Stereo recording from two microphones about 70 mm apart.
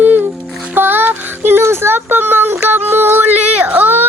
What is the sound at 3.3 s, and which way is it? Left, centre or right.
Speech, right.